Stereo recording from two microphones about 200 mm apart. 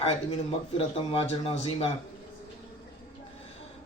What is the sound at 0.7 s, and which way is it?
Speech, 30° left (ahead or behind).